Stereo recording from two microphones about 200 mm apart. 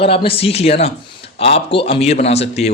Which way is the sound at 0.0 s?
30° left (ahead or behind).